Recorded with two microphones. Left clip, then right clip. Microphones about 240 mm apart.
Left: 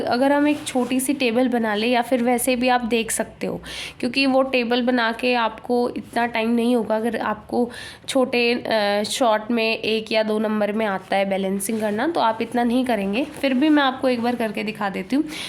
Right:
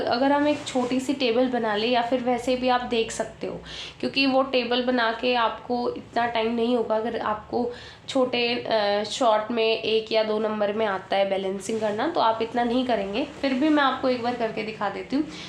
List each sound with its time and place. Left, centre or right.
0.0 s speech: left